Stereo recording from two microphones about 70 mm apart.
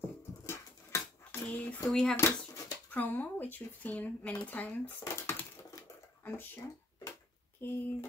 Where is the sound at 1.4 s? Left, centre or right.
Left.